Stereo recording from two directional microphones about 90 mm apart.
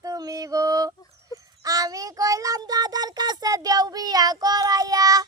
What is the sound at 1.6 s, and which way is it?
Child singing, 40° right (ahead or behind).